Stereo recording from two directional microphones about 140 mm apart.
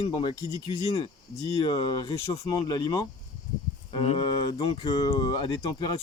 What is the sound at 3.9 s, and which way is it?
Speech, 40° left (ahead or behind).